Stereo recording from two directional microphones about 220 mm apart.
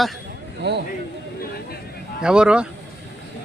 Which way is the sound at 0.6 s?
50° right (ahead or behind).